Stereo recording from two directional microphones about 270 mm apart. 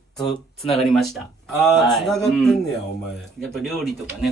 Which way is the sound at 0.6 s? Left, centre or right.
Left.